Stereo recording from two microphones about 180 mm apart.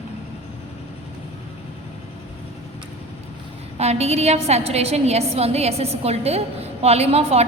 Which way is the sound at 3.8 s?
35° right (ahead or behind).